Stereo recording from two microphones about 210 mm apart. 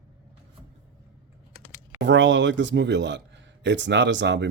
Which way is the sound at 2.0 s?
60° right (ahead or behind).